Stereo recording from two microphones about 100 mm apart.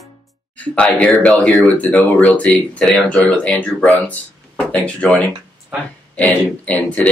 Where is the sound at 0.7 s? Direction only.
10° left (ahead or behind).